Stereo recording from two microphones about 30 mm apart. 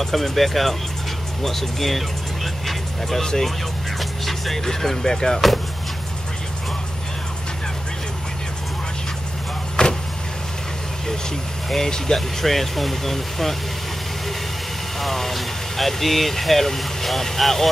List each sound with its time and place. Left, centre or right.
0.0 s speech: centre
3.2 s speech: centre
4.0 s music: centre
4.6 s speech: centre
9.8 s vehicle: left
11.7 s speech: centre
12.4 s speech: centre
15.0 s speech: centre